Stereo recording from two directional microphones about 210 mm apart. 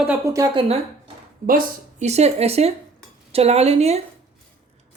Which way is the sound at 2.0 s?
30° right (ahead or behind).